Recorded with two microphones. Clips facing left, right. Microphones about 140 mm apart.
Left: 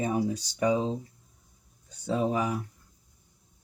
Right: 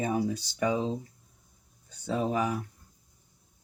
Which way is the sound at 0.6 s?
25° left (ahead or behind).